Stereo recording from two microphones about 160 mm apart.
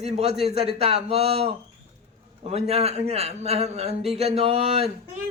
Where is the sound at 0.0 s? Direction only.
40° right (ahead or behind).